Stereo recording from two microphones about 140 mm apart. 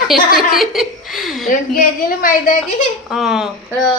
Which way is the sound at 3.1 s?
5° right (ahead or behind).